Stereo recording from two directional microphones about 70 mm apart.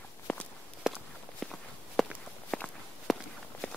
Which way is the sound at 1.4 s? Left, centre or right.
Centre.